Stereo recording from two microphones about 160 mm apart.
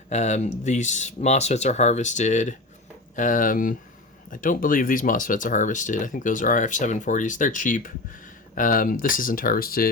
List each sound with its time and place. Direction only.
0.1 s speech: 45° left (ahead or behind); by 9.9 s 65° left (ahead or behind)